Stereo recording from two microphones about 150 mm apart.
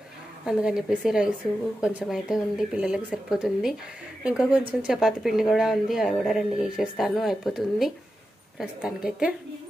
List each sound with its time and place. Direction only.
0.5 s speech: 5° right (ahead or behind)